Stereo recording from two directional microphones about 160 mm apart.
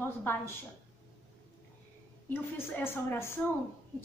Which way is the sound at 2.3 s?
15° left (ahead or behind).